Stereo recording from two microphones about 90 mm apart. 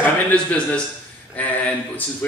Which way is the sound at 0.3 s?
15° left (ahead or behind).